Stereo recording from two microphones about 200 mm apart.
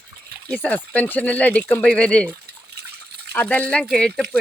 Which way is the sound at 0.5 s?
5° left (ahead or behind).